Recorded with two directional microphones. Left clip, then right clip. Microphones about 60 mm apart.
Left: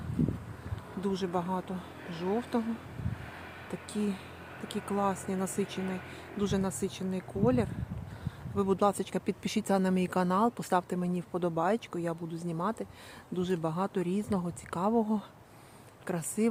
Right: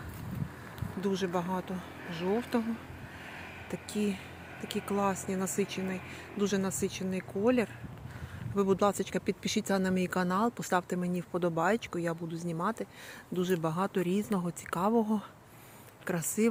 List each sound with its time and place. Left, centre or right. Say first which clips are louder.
1.0 s speech: even; left
4.6 s speech: even; centre
8.5 s speech: even; left
9.4 s speech: left 3 dB; left
11.3 s speech: right 1 dB; centre
12.5 s speech: even; centre
16.0 s speech: right 1 dB; centre